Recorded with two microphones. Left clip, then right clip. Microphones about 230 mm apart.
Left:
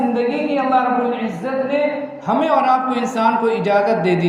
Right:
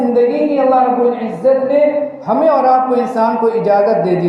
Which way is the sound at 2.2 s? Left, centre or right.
Left.